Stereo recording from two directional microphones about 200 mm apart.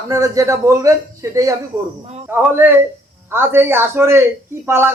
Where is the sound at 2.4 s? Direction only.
10° right (ahead or behind).